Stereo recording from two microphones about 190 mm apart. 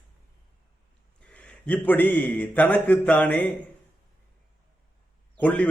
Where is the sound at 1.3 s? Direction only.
5° left (ahead or behind).